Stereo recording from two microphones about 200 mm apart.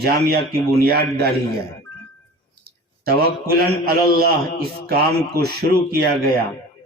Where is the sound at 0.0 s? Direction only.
50° right (ahead or behind).